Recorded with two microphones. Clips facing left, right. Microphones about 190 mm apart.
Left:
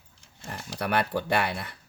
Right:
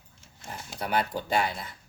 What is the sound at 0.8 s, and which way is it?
Speech, 65° left (ahead or behind).